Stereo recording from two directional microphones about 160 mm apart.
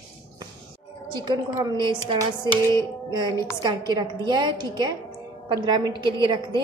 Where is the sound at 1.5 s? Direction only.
25° right (ahead or behind).